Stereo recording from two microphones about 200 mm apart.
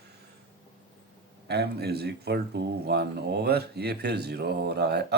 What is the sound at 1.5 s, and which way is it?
Speech, 55° right (ahead or behind).